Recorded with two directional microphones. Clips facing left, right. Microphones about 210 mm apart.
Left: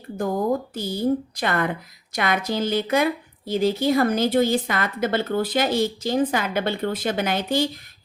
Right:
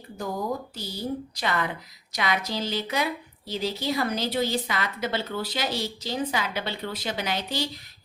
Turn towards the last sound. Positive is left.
turn(degrees=50)  # may be behind; listen again after turning